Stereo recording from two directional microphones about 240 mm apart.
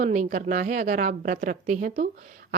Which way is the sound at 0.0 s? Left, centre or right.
Right.